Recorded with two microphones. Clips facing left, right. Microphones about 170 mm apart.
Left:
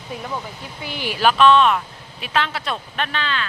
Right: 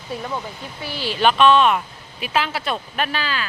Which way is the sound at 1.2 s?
Centre (ahead or behind).